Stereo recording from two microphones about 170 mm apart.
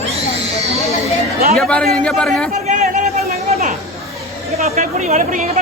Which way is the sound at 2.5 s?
45° right (ahead or behind).